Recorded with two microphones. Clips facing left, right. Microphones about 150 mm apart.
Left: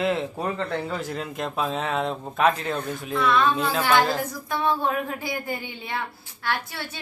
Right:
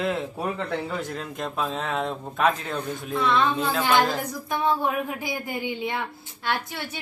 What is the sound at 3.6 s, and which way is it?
Speech, 5° left (ahead or behind).